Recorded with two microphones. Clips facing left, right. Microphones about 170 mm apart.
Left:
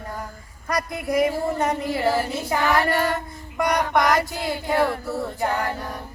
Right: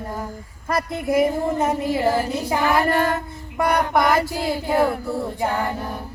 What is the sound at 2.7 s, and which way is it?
Female singing, 5° right (ahead or behind).